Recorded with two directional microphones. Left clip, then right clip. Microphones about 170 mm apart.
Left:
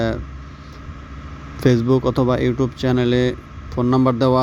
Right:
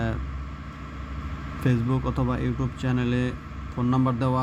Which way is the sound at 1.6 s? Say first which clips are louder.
Left 11 dB; 35° left (ahead or behind).